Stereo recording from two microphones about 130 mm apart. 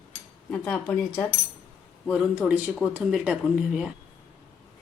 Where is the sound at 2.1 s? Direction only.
Centre (ahead or behind).